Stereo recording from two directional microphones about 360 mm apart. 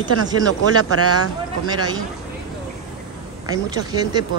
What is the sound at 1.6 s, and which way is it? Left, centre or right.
Speech, centre.